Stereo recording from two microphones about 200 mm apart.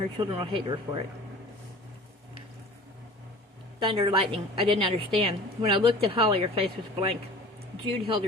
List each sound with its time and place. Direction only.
0.2 s a woman's voice: 25° right (ahead or behind)
3.8 s a woman's voice: 25° right (ahead or behind)